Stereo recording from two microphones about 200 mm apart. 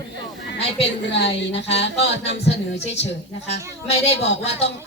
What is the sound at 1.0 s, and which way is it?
Speech, 60° left (ahead or behind).